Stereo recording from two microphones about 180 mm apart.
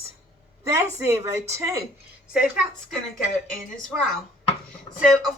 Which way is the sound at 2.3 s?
5° right (ahead or behind).